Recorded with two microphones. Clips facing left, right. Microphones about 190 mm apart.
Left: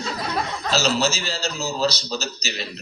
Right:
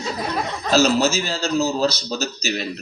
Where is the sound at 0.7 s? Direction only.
55° right (ahead or behind).